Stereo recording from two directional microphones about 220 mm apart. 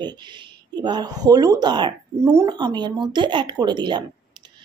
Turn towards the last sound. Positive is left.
turn(degrees=-20)  # may be behind; listen again after turning